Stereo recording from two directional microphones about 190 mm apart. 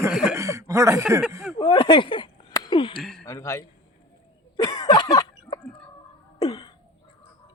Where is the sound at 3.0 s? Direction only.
Centre (ahead or behind).